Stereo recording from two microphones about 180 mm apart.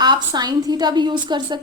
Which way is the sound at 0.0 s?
25° right (ahead or behind).